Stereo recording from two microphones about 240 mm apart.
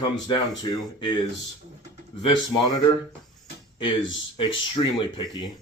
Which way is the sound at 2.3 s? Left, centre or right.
Centre.